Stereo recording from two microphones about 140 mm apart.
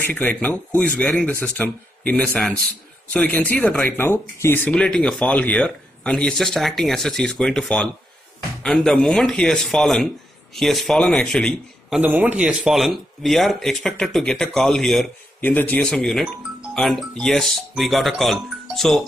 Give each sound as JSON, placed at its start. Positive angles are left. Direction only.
{"t": 0.0, "sound": "speech", "side_deg": 15}
{"t": 12.0, "sound": "speech", "side_deg": -10}